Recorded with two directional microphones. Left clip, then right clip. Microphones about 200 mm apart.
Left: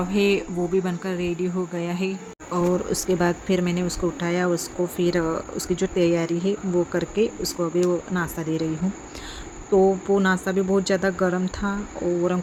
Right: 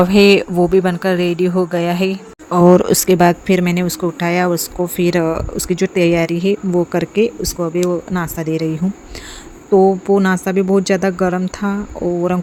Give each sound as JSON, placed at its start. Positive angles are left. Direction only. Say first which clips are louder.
{"t": 0.0, "sound": "speech", "louder": "right 12 dB", "side_deg": -50}